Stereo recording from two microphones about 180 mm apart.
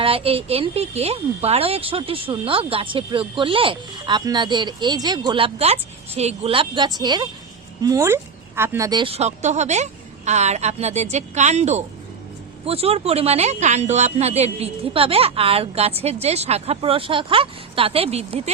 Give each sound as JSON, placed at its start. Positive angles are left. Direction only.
{"t": 0.0, "sound": "speech", "side_deg": -30}